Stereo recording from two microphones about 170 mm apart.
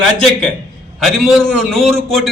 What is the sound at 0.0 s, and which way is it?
A man's voice, centre (ahead or behind).